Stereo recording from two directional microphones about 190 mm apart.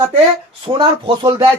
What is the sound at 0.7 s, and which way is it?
Speech, 25° right (ahead or behind).